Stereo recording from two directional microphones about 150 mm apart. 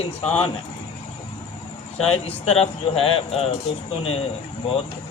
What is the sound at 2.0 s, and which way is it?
A man's voice, 40° left (ahead or behind).